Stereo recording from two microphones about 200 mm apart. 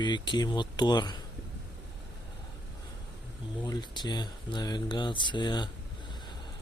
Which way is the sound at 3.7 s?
20° left (ahead or behind).